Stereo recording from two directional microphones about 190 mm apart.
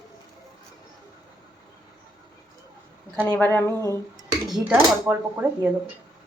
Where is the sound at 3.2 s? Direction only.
10° left (ahead or behind).